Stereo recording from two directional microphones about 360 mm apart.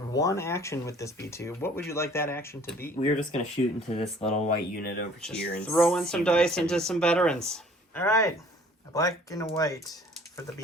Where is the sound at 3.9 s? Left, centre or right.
Centre.